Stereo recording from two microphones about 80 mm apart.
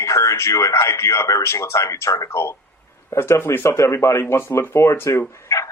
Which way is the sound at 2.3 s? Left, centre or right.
Left.